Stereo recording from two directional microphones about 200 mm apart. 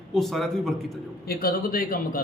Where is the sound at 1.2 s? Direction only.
45° left (ahead or behind).